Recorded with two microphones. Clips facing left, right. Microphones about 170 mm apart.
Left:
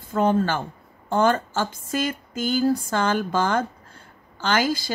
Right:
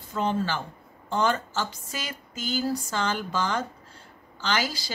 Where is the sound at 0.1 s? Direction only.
50° left (ahead or behind).